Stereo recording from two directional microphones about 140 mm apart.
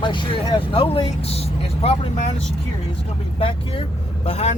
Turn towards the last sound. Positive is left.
turn(degrees=50)  # may be behind; listen again after turning